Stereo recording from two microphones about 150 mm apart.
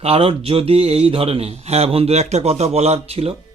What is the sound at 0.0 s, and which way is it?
Speech, 40° right (ahead or behind).